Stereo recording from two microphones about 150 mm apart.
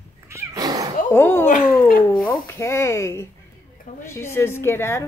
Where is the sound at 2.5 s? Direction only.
20° left (ahead or behind).